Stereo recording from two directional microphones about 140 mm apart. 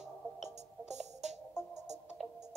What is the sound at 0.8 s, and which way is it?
Music, 55° right (ahead or behind).